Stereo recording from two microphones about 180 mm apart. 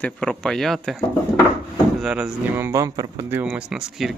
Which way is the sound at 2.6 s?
15° right (ahead or behind).